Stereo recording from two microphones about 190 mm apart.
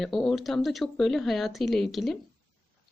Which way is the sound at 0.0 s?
Centre (ahead or behind).